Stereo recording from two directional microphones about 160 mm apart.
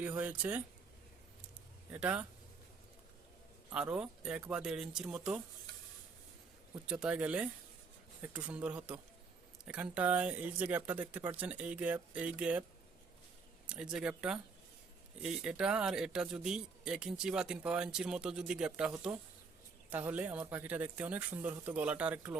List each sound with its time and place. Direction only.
0.0 s speech: 10° right (ahead or behind)
1.9 s speech: 10° right (ahead or behind)
3.7 s speech: 5° right (ahead or behind)
6.8 s speech: 5° right (ahead or behind)
13.7 s speech: 5° right (ahead or behind)